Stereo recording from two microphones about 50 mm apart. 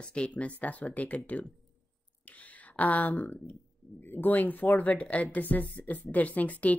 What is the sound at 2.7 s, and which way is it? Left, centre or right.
Speech, left.